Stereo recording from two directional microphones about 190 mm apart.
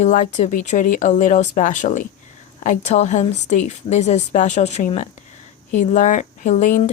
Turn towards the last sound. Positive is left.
turn(degrees=40)  # may be behind; listen again after turning